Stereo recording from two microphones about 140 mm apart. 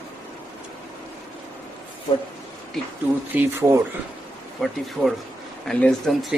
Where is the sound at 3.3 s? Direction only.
20° right (ahead or behind).